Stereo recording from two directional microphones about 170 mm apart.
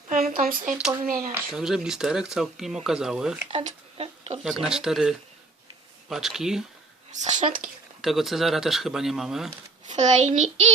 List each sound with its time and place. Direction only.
0.1 s a child's voice: 55° right (ahead or behind)
1.3 s speech: 5° right (ahead or behind)
3.5 s speech: 35° right (ahead or behind)
4.4 s speech: centre (ahead or behind)
7.1 s a child's voice: 45° right (ahead or behind)
8.0 s speech: centre (ahead or behind)
9.9 s a child's voice: 45° right (ahead or behind)